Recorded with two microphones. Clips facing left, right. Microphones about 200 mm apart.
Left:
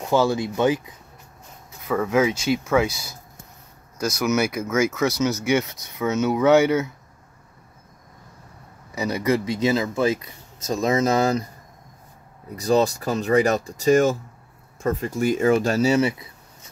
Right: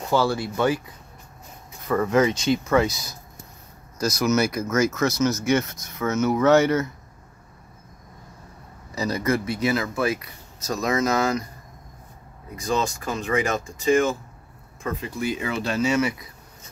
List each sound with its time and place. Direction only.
0.1 s speech: 20° left (ahead or behind)
1.9 s speech: 5° left (ahead or behind)
9.1 s speech: 15° left (ahead or behind); by 11.4 s 30° left (ahead or behind)
12.5 s speech: 35° left (ahead or behind)